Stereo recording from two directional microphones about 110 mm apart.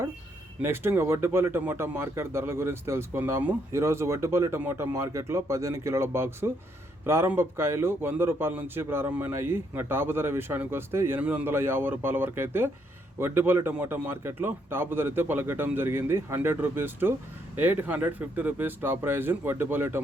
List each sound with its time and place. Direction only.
0.6 s speech: 20° right (ahead or behind)